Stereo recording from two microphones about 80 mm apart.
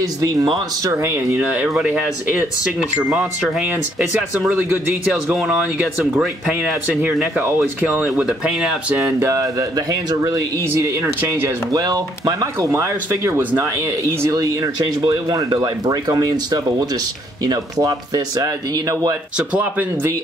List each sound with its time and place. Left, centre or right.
0.0 s speech: right
0.8 s speech: right; by 3.6 s centre
3.6 s speech: right
5.1 s speech: centre
7.3 s speech: right
9.0 s speech: right
10.6 s speech: right
11.8 s speech: right
12.5 s speech: right
13.8 s speech: right
19.3 s speech: right